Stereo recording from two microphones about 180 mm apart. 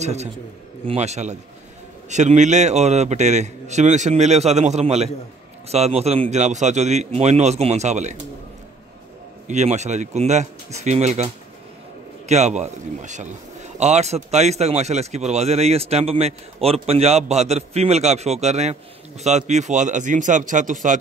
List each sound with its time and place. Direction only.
0.0 s a man's voice: 40° right (ahead or behind)
9.5 s a man's voice: 40° right (ahead or behind)
12.3 s a man's voice: 40° right (ahead or behind)